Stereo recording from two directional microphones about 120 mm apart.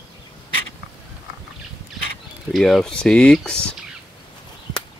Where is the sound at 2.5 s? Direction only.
Centre (ahead or behind).